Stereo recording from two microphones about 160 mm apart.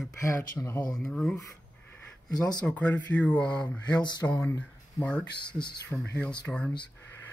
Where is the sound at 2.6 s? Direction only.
10° left (ahead or behind).